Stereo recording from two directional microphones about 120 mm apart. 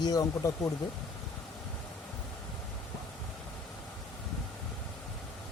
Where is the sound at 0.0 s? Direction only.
30° left (ahead or behind).